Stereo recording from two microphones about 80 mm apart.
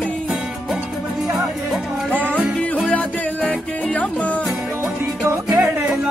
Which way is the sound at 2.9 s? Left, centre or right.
Centre.